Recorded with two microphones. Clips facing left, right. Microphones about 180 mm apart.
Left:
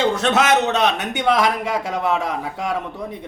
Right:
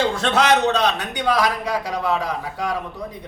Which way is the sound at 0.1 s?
20° left (ahead or behind).